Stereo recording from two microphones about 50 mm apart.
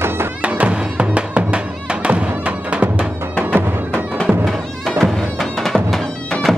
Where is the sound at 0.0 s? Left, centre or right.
Right.